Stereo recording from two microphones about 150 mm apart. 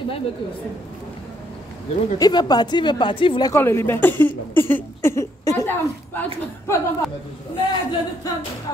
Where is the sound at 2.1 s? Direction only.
25° left (ahead or behind).